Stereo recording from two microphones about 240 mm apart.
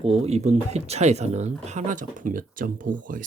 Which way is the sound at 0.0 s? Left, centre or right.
Right.